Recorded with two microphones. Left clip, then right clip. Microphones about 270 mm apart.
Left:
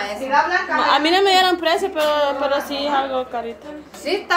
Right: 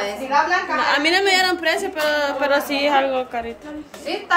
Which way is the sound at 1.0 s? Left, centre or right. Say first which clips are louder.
Left 1 dB; centre.